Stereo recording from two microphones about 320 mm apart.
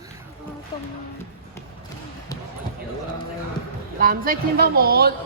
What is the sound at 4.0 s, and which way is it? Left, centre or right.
Speech, right.